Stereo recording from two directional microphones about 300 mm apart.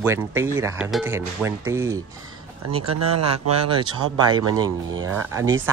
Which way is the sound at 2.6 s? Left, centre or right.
Right.